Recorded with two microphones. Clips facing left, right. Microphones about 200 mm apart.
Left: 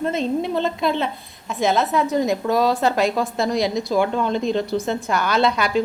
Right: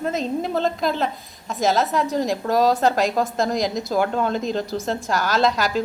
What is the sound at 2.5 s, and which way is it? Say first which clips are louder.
Speech: right 3 dB; 40° right (ahead or behind).